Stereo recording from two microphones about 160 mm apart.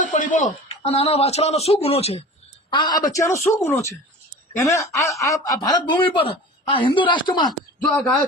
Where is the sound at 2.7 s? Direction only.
30° left (ahead or behind).